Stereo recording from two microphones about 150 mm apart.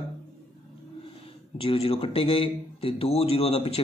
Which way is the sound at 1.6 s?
40° left (ahead or behind).